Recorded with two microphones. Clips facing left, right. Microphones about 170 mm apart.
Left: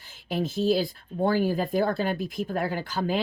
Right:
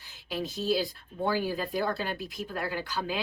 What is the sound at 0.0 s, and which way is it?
Speech, 50° left (ahead or behind).